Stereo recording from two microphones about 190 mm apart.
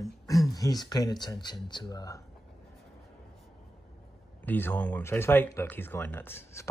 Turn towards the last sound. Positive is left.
turn(degrees=10)  # may be behind; listen again after turning